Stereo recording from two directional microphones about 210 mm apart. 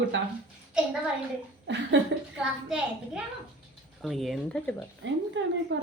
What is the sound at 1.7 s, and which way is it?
Speech, 60° right (ahead or behind).